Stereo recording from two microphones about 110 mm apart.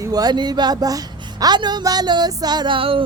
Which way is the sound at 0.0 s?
35° right (ahead or behind).